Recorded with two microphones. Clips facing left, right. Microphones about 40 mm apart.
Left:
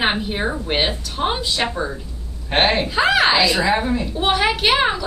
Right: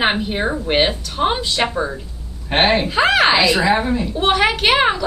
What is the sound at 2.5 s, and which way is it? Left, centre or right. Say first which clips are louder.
A woman's voice: right 2 dB; centre.